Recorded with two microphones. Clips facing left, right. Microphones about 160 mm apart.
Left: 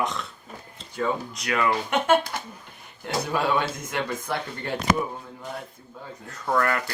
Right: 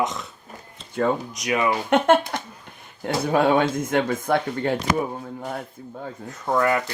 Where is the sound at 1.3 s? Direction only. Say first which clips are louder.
Right 2 dB; 20° right (ahead or behind).